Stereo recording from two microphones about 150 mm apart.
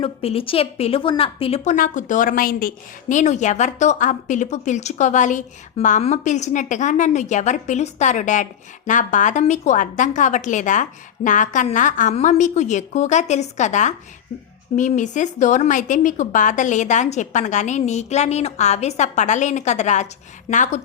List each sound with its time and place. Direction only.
0.0 s a woman's voice: 40° left (ahead or behind)
1.7 s a woman's voice: 60° left (ahead or behind)